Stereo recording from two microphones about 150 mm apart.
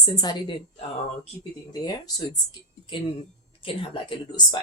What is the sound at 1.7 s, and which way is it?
Speech, 25° left (ahead or behind).